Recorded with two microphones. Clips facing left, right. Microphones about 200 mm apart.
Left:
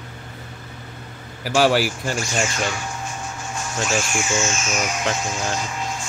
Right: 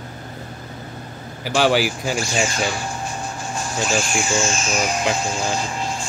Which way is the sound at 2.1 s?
35° right (ahead or behind).